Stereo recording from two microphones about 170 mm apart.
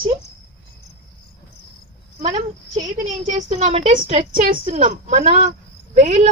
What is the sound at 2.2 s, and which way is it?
A woman's voice, 45° right (ahead or behind).